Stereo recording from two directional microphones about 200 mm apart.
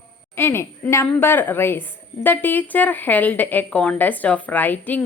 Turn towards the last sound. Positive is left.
turn(degrees=10)  # may be behind; listen again after turning